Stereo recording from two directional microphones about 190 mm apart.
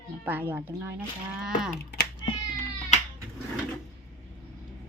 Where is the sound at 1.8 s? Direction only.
60° left (ahead or behind).